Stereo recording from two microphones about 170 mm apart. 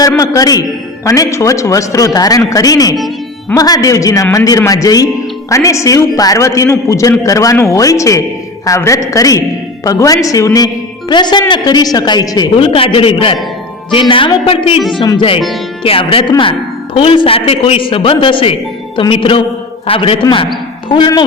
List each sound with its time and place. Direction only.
0.2 s a man's voice: 20° left (ahead or behind)